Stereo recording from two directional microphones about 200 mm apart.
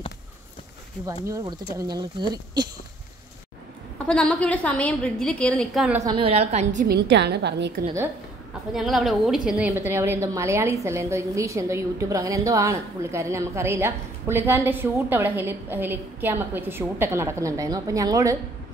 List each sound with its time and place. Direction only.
1.2 s speech: 20° right (ahead or behind)
4.0 s a woman's voice: 5° left (ahead or behind)
6.0 s a woman's voice: 25° right (ahead or behind)
6.9 s a woman's voice: 60° right (ahead or behind)
8.7 s a woman's voice: centre (ahead or behind); by 18.4 s 15° right (ahead or behind)